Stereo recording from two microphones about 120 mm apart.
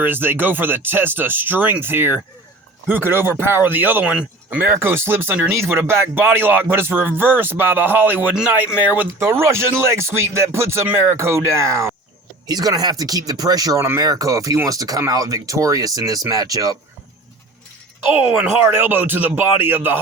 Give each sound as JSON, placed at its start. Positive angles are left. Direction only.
{"t": 0.0, "sound": "speech", "side_deg": -15}
{"t": 18.0, "sound": "speech", "side_deg": -15}